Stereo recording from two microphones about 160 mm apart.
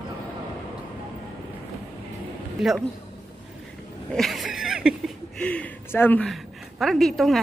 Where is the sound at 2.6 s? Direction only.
5° right (ahead or behind).